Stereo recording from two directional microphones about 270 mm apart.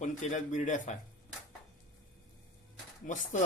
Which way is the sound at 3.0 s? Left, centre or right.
Left.